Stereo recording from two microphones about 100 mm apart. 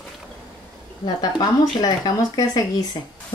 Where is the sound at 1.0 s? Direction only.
45° left (ahead or behind).